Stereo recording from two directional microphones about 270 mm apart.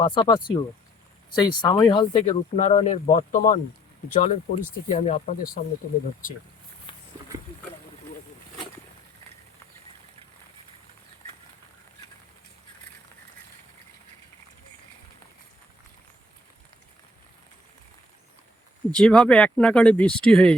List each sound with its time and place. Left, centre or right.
0.0 s speech: centre
6.9 s wild animals: centre
18.9 s speech: centre